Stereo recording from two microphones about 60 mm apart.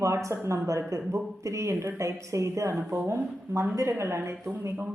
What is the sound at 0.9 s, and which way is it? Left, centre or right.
A woman's voice, right.